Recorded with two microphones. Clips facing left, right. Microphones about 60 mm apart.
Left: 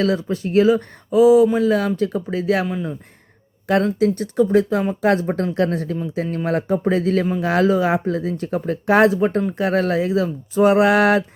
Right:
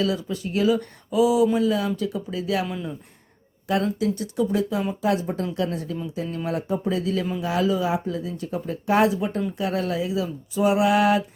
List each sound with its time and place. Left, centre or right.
0.0 s speech: left
2.6 s speech: left
3.7 s speech: left